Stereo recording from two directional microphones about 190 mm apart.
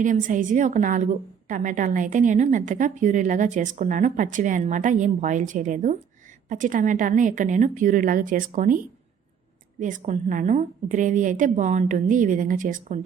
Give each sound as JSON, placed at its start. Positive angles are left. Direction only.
{"t": 0.0, "sound": "a woman's voice", "side_deg": -45}
{"t": 9.8, "sound": "a woman's voice", "side_deg": -40}